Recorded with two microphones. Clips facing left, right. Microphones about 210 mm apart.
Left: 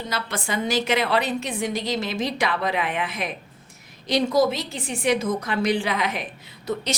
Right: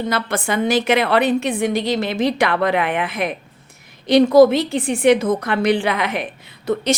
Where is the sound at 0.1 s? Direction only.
55° right (ahead or behind).